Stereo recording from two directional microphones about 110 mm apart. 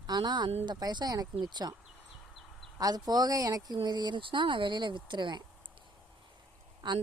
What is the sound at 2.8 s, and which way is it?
Speech, 35° right (ahead or behind).